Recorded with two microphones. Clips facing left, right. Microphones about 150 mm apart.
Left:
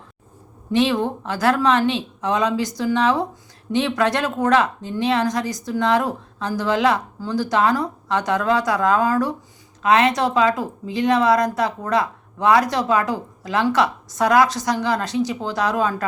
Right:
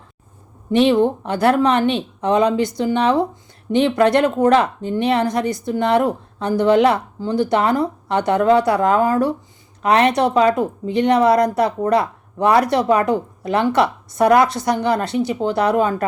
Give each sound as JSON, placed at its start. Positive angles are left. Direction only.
{"t": 0.8, "sound": "speech", "side_deg": -25}